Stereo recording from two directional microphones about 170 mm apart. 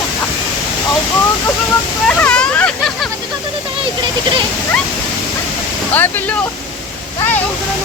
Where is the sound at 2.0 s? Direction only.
5° left (ahead or behind).